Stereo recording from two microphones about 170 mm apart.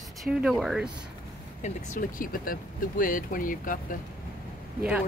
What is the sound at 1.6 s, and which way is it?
Speech, 55° left (ahead or behind).